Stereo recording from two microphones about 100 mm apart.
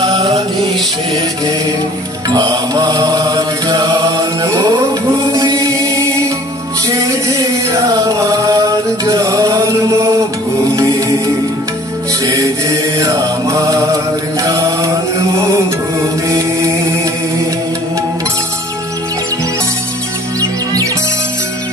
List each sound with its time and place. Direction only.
2.2 s mantra: 40° right (ahead or behind)
5.3 s music: 35° right (ahead or behind)
6.9 s chant: 35° right (ahead or behind)
12.3 s mantra: 35° right (ahead or behind)
20.3 s music: 35° right (ahead or behind)